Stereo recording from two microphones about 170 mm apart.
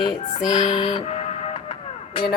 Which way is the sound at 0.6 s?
30° left (ahead or behind).